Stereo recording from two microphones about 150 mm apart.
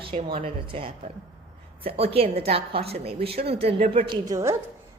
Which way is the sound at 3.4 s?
90° right.